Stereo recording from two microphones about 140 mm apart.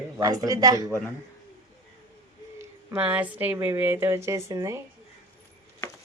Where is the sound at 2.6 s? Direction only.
15° right (ahead or behind).